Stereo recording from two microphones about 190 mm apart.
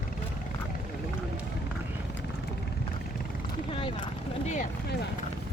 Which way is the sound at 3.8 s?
25° left (ahead or behind).